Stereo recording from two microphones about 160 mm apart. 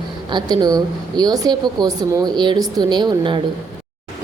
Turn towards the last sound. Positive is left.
turn(degrees=-30)  # may be behind; listen again after turning